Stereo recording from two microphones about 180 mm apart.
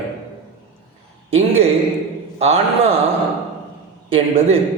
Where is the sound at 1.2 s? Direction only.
35° right (ahead or behind).